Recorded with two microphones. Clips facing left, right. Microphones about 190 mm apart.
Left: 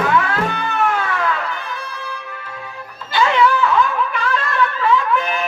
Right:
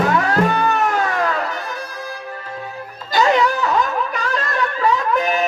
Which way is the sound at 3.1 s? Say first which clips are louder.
Even; 40° right (ahead or behind).